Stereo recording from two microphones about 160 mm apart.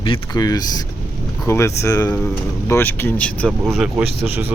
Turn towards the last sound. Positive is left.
turn(degrees=0)  # may be behind; listen again after turning